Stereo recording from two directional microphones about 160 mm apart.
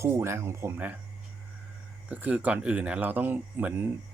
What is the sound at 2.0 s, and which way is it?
Speech, 10° right (ahead or behind).